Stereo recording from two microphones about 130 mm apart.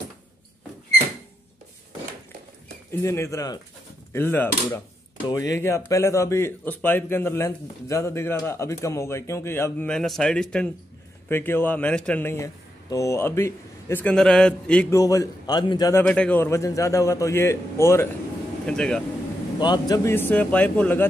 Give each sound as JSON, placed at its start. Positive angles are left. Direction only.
{"t": 3.0, "sound": "a man's voice", "side_deg": 20}
{"t": 9.8, "sound": "a man's voice", "side_deg": 5}
{"t": 11.2, "sound": "a man's voice", "side_deg": 15}
{"t": 14.1, "sound": "a man's voice", "side_deg": 5}
{"t": 14.9, "sound": "a man's voice", "side_deg": 25}
{"t": 15.9, "sound": "a man's voice", "side_deg": 10}
{"t": 18.7, "sound": "a man's voice", "side_deg": 5}
{"t": 19.6, "sound": "a man's voice", "side_deg": 35}
{"t": 20.1, "sound": "a man's voice", "side_deg": 15}